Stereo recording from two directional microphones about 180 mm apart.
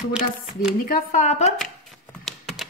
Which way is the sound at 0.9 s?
50° left (ahead or behind).